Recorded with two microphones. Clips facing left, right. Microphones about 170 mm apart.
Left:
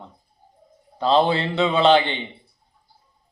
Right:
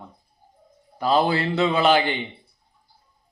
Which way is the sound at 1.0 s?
25° left (ahead or behind).